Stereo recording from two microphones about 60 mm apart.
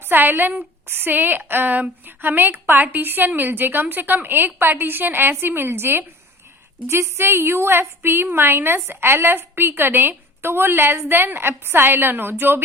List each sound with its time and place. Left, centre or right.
0.0 s a woman's voice: right
6.8 s a woman's voice: right